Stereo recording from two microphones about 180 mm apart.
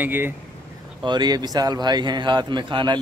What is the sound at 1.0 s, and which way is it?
A man's voice, 25° right (ahead or behind).